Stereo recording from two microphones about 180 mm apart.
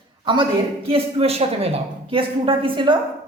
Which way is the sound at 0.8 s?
35° right (ahead or behind).